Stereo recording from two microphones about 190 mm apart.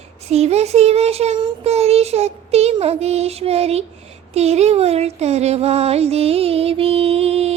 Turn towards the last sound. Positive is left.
turn(degrees=-30)  # may be behind; listen again after turning